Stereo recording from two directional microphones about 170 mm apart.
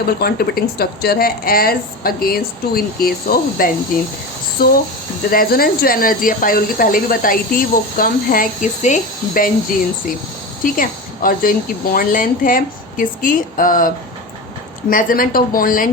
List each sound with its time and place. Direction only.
0.0 s speech: 70° left (ahead or behind)